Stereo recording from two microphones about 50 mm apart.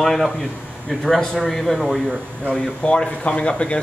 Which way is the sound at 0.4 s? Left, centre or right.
Centre.